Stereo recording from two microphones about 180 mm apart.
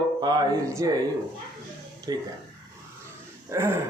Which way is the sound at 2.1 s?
20° right (ahead or behind).